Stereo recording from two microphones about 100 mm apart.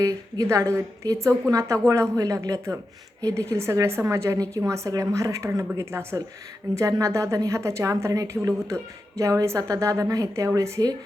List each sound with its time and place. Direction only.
0.0 s a woman's voice: 30° right (ahead or behind)